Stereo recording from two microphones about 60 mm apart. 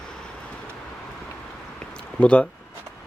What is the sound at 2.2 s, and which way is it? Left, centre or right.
Speech, centre.